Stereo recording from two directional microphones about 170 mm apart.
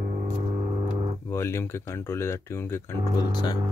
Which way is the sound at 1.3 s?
15° left (ahead or behind).